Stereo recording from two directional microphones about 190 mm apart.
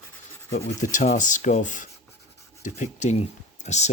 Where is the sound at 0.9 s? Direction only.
40° left (ahead or behind).